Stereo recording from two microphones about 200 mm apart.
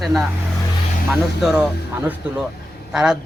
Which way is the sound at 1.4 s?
5° right (ahead or behind).